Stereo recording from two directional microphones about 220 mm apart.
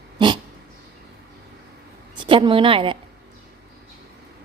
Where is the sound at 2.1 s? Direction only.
20° right (ahead or behind).